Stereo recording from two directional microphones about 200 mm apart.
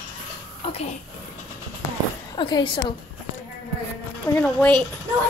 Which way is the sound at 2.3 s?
25° left (ahead or behind).